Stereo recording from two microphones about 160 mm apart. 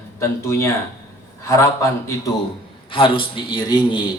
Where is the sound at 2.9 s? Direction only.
35° left (ahead or behind).